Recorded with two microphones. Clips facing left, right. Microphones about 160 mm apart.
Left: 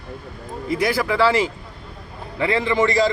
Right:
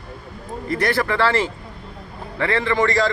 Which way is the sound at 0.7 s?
10° left (ahead or behind).